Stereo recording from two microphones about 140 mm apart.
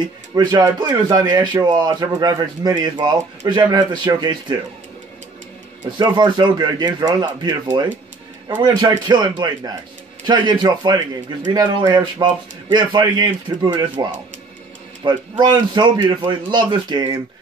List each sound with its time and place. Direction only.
0.0 s speech: 30° right (ahead or behind)
5.9 s speech: 30° right (ahead or behind)
8.8 s speech: 30° right (ahead or behind)
15.0 s speech: 30° right (ahead or behind)